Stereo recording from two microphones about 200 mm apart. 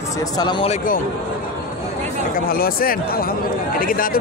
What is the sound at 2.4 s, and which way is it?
Speech, 45° left (ahead or behind).